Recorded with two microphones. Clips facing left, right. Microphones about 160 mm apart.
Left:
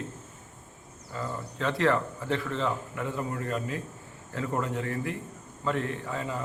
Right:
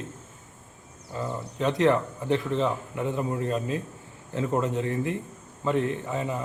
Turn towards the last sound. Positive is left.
turn(degrees=-20)  # may be behind; listen again after turning